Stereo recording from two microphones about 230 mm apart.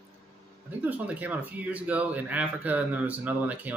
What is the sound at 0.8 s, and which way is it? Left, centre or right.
Speech, centre.